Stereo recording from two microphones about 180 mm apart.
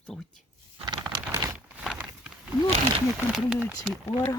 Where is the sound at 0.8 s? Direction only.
20° right (ahead or behind).